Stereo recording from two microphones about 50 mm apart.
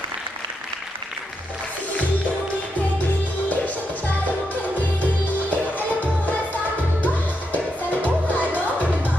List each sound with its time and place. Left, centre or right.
5.5 s music: left